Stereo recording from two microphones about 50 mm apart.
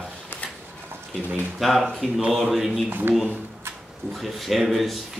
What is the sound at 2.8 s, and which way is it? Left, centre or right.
Speech, right.